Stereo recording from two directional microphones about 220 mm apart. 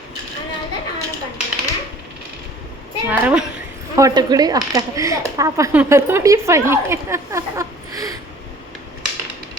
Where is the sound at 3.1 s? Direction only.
5° right (ahead or behind).